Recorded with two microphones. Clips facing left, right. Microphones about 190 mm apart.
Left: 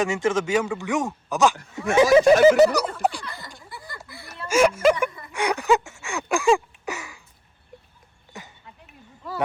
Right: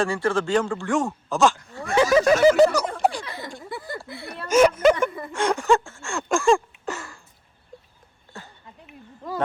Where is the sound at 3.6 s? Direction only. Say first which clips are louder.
Right 8 dB; 55° right (ahead or behind).